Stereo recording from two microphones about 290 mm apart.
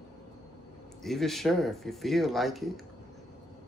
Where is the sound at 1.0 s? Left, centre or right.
Centre.